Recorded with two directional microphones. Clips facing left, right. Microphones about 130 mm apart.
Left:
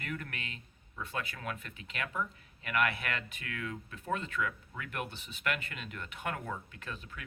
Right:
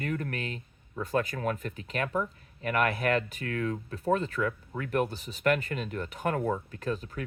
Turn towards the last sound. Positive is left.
turn(degrees=-40)  # may be behind; listen again after turning